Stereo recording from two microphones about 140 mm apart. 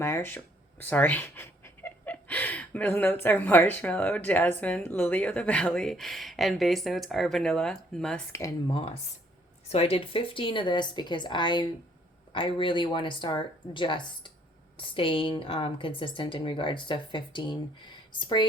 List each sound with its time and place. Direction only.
0.0 s speech: 20° left (ahead or behind)
8.3 s speech: 25° left (ahead or behind)
9.7 s a woman's voice: 45° left (ahead or behind)